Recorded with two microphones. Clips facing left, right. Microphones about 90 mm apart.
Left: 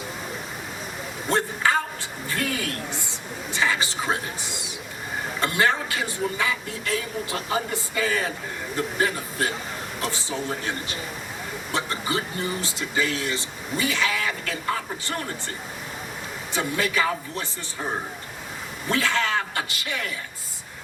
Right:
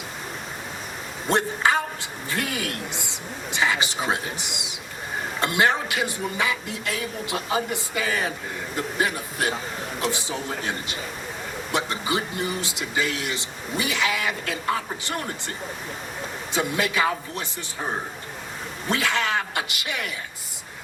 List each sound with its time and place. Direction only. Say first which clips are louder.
1.3 s speech: right 1 dB; 20° right (ahead or behind)
11.7 s speech: right 1 dB; 20° right (ahead or behind)
16.5 s speech: right 1 dB; 20° right (ahead or behind)
18.9 s speech: even; 20° right (ahead or behind)